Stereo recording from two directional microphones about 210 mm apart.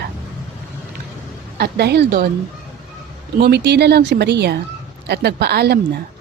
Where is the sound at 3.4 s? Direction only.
50° right (ahead or behind).